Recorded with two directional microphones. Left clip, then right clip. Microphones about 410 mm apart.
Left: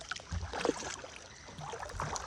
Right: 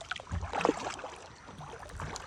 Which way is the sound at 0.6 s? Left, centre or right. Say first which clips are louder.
Right 4 dB; centre.